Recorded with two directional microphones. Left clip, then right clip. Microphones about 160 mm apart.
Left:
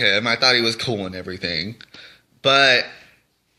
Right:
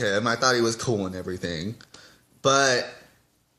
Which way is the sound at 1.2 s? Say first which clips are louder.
Left 4 dB; 10° left (ahead or behind).